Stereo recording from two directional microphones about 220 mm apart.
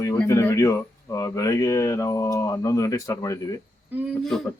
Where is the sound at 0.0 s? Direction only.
10° left (ahead or behind).